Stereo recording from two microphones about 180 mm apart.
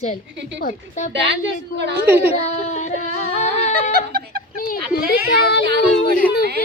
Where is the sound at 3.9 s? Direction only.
60° right (ahead or behind).